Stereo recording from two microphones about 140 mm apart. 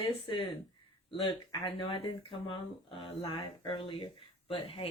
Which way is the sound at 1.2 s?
40° left (ahead or behind).